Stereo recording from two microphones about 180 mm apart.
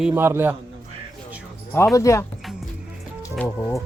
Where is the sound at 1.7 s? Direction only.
15° left (ahead or behind).